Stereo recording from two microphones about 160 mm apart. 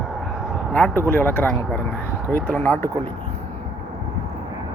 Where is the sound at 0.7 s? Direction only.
10° left (ahead or behind).